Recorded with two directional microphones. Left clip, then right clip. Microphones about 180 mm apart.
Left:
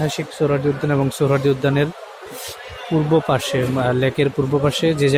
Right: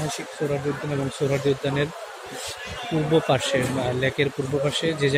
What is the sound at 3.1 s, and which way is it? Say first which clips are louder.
A man's voice: left 2 dB; 30° left (ahead or behind).